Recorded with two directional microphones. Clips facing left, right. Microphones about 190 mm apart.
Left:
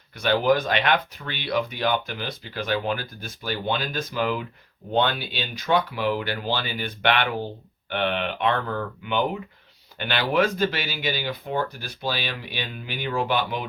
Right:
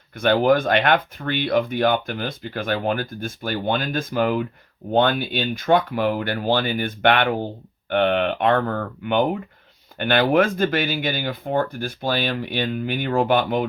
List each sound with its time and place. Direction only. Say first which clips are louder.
0.2 s speech: right 4 dB; 50° right (ahead or behind)